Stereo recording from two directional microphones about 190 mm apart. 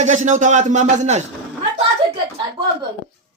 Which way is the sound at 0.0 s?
40° right (ahead or behind).